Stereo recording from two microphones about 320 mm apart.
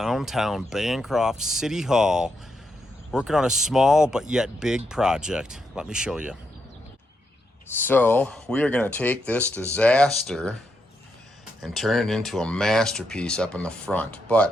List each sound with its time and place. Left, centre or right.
0.0 s speech: centre
7.8 s speech: centre
11.6 s speech: centre